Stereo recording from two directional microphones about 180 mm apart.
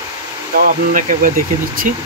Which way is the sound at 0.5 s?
55° right (ahead or behind).